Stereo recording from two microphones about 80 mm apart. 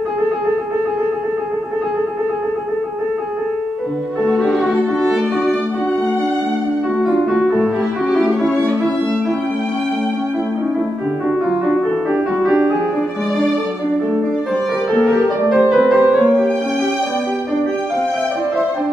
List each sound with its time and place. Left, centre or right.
4.3 s music: centre
12.1 s piano: centre
15.0 s music: centre